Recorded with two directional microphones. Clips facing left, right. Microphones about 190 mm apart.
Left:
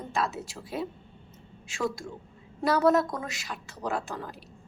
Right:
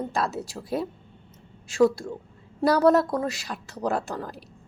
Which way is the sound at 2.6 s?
35° right (ahead or behind).